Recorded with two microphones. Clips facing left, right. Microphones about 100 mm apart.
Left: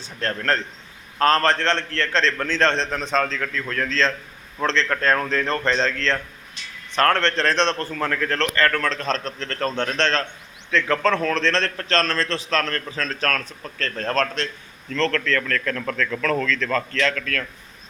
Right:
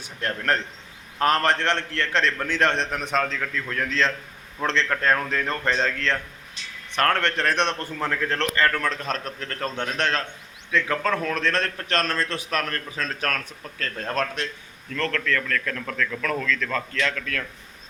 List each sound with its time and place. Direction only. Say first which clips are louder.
0.0 s a man's voice: left 2 dB; 15° right (ahead or behind)